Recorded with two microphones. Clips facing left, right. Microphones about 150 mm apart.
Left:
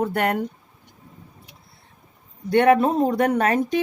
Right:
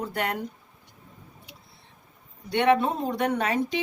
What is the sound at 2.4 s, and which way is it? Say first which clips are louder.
Speech: left 5 dB; 45° left (ahead or behind).